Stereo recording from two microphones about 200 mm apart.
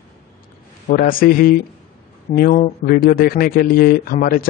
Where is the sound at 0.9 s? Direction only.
45° left (ahead or behind).